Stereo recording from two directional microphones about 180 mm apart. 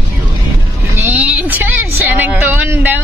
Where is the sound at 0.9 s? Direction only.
10° right (ahead or behind).